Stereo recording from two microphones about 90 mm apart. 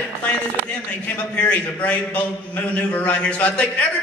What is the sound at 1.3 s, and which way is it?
A man's voice, 15° left (ahead or behind).